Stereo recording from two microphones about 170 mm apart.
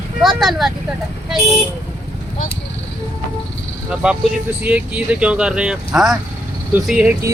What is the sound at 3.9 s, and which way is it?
Speech, 5° right (ahead or behind).